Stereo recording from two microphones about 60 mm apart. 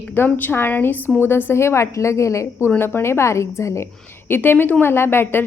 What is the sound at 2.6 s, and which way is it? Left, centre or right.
A woman's voice, left.